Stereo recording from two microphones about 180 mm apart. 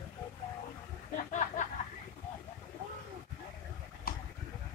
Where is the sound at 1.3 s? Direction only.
45° left (ahead or behind).